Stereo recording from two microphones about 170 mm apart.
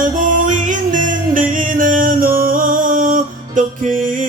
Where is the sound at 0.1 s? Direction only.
50° right (ahead or behind).